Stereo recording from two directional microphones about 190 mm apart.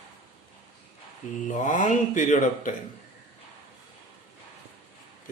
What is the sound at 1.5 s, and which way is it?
Speech, 40° left (ahead or behind).